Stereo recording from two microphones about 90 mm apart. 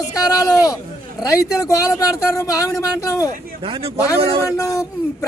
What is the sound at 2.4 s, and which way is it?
Speech, 35° left (ahead or behind).